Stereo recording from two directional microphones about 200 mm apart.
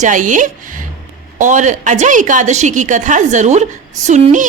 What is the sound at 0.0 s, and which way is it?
A woman's voice, 40° right (ahead or behind).